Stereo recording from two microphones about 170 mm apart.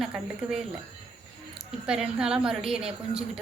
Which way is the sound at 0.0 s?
5° right (ahead or behind).